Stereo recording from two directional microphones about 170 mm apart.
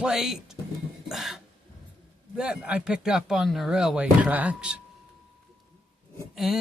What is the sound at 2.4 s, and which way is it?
Speech, 5° right (ahead or behind).